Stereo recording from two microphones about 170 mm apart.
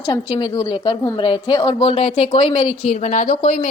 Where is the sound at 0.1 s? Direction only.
25° left (ahead or behind).